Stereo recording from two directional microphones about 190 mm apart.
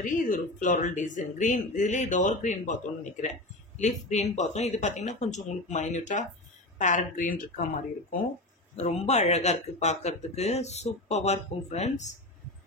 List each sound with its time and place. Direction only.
0.0 s speech: 45° left (ahead or behind)
8.7 s speech: 35° left (ahead or behind)